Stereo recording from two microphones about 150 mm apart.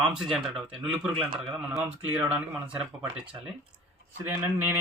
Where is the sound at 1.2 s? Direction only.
35° right (ahead or behind).